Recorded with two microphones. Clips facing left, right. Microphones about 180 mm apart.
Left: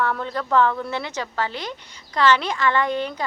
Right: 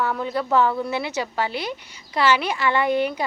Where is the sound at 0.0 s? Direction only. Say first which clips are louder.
Right 1 dB; 5° right (ahead or behind).